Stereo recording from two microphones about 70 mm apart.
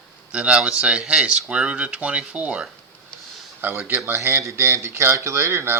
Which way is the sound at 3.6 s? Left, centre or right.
Right.